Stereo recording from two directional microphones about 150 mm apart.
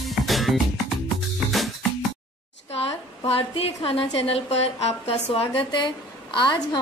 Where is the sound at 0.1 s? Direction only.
Centre (ahead or behind).